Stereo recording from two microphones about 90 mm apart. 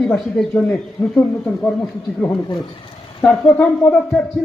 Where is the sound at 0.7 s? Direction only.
20° left (ahead or behind).